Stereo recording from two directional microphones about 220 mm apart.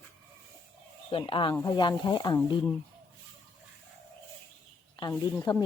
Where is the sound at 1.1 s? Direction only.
25° left (ahead or behind).